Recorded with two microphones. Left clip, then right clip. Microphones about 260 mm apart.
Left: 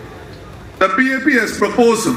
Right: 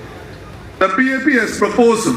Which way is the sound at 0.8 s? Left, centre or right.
Centre.